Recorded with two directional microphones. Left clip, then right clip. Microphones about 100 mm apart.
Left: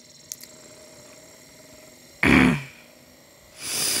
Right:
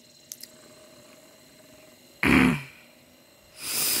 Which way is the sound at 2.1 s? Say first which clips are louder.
Left 3 dB; 25° left (ahead or behind).